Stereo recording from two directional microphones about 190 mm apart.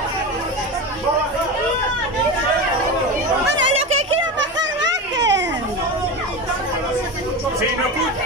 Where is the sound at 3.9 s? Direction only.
70° right (ahead or behind).